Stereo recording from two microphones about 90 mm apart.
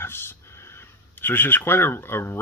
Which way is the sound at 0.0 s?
25° left (ahead or behind).